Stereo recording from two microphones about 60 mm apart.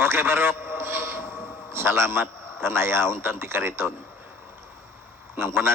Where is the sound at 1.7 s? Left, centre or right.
Right.